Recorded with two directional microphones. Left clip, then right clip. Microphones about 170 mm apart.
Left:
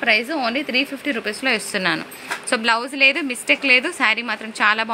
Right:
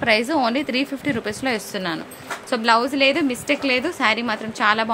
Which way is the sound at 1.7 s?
5° left (ahead or behind).